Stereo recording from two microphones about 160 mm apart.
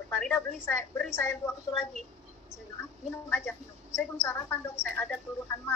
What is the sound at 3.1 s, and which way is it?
A woman's voice, 15° left (ahead or behind).